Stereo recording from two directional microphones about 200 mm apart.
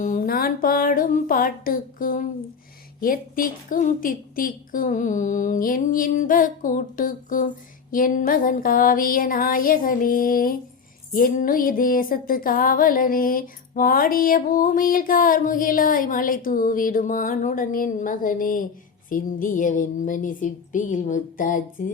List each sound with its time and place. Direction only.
0.0 s music: 40° left (ahead or behind)